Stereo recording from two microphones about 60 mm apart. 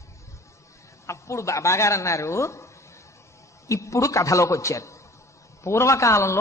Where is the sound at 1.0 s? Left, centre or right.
Left.